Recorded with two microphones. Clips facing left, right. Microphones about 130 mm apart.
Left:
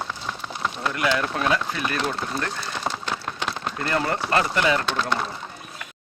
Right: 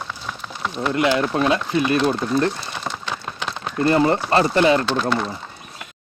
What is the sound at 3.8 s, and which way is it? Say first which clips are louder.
Speech: right 8 dB; 25° right (ahead or behind).